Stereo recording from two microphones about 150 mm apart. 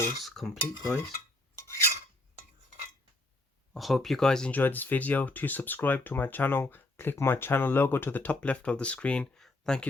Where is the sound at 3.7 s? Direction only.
Centre (ahead or behind).